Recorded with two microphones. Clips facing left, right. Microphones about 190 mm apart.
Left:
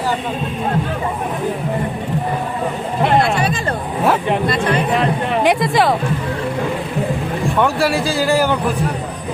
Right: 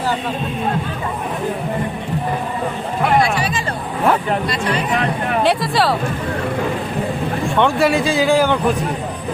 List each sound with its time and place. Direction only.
3.2 s a sound: 55° left (ahead or behind)
4.4 s speech: 50° left (ahead or behind)
5.4 s speech: 20° left (ahead or behind)
7.5 s a man's voice: centre (ahead or behind)